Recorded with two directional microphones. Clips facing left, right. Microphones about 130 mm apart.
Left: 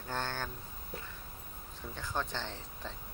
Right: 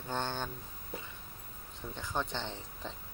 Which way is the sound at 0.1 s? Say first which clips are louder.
Right 2 dB; 20° right (ahead or behind).